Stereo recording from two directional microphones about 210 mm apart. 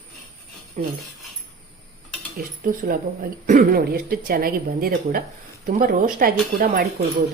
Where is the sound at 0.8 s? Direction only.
35° right (ahead or behind).